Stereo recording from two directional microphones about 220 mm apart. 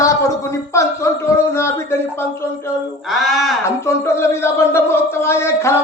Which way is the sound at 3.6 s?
10° left (ahead or behind).